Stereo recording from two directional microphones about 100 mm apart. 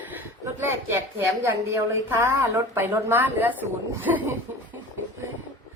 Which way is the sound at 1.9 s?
25° right (ahead or behind).